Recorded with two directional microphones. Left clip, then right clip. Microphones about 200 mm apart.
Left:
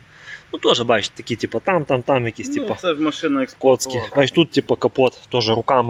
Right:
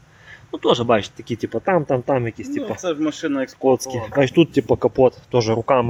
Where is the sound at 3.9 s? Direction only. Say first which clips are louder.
Left 2 dB; 5° right (ahead or behind).